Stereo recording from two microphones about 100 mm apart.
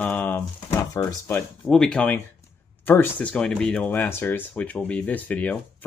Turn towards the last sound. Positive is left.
turn(degrees=15)  # may be behind; listen again after turning